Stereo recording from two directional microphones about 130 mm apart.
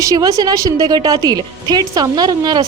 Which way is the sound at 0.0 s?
25° right (ahead or behind).